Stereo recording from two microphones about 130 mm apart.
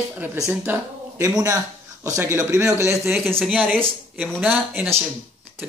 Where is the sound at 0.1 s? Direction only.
15° right (ahead or behind).